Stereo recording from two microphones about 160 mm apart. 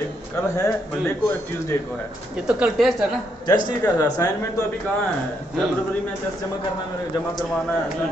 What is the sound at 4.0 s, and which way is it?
Speech, 25° left (ahead or behind).